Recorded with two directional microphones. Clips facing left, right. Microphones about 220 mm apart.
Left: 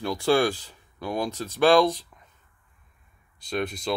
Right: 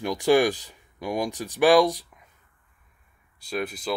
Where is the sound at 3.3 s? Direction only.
5° right (ahead or behind).